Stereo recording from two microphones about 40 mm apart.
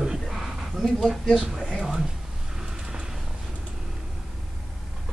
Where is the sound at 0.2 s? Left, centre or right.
Centre.